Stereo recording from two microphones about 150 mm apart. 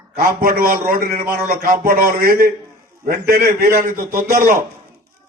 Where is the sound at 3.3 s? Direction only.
85° right.